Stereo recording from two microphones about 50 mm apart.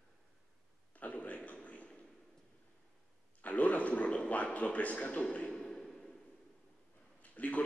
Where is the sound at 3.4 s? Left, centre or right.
Left.